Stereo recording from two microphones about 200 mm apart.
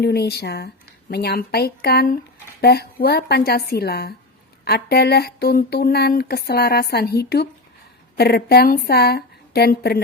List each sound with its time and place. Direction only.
0.0 s a woman's voice: 55° left (ahead or behind)